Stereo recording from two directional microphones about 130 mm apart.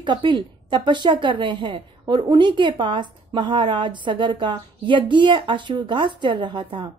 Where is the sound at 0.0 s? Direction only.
35° right (ahead or behind).